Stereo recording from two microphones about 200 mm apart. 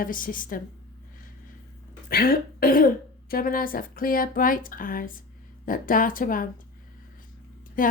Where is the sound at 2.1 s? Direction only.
45° left (ahead or behind).